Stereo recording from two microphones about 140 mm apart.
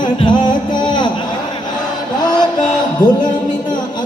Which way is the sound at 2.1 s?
30° left (ahead or behind).